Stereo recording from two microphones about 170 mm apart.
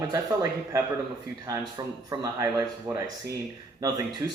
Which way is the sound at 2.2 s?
20° right (ahead or behind).